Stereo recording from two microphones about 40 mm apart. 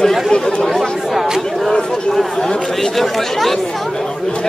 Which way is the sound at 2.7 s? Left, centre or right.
Centre.